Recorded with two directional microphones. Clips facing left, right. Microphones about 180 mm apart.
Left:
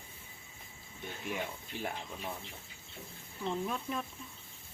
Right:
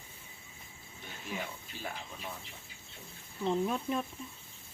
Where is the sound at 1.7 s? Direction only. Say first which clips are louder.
Left 4 dB; 60° left (ahead or behind).